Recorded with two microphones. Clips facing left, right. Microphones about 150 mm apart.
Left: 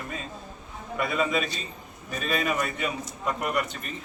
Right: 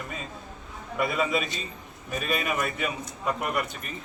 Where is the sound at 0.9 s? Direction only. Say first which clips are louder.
Even; 5° right (ahead or behind).